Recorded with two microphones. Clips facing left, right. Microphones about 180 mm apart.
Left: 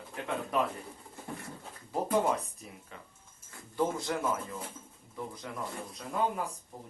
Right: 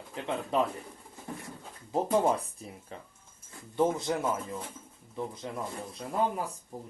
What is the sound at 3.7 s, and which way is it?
Speech, 20° right (ahead or behind).